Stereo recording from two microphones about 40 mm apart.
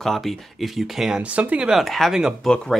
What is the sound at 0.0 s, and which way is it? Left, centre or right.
Speech, centre.